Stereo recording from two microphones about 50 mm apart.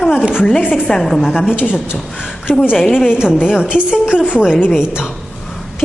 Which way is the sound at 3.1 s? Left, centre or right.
Centre.